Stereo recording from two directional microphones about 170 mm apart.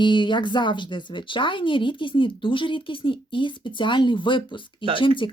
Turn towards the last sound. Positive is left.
turn(degrees=30)  # may be behind; listen again after turning